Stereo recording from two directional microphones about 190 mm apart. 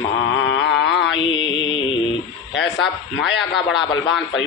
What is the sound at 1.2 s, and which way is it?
Mantra, 25° left (ahead or behind).